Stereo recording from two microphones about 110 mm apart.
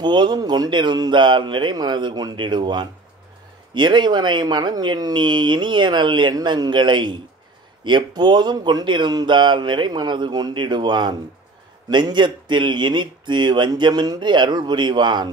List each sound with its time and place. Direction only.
0.0 s speech: 40° right (ahead or behind)